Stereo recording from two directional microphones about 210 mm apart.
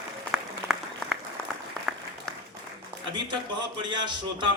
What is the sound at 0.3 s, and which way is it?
Applause, 5° right (ahead or behind).